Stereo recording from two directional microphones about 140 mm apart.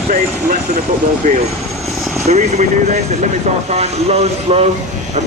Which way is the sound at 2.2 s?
55° right (ahead or behind).